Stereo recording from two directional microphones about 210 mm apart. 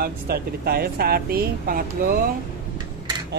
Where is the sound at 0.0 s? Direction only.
45° right (ahead or behind).